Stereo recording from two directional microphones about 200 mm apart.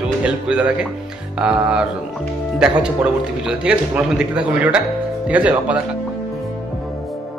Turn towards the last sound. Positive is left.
turn(degrees=-5)  # may be behind; listen again after turning